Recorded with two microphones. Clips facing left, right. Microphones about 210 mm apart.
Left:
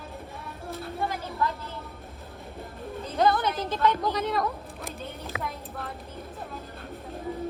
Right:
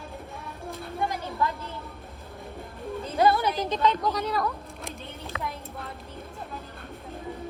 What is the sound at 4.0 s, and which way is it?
Speech, centre (ahead or behind).